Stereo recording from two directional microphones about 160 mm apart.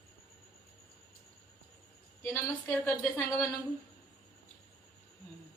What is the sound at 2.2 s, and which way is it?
A woman's voice, 15° left (ahead or behind).